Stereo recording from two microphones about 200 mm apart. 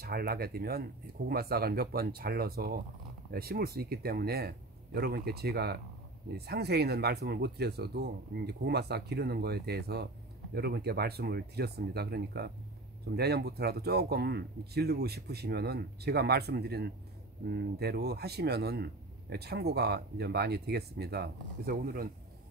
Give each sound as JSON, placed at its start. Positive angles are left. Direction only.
{"t": 0.0, "sound": "a man's voice", "side_deg": -50}